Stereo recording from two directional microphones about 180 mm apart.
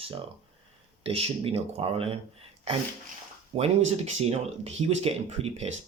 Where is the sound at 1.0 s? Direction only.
30° right (ahead or behind).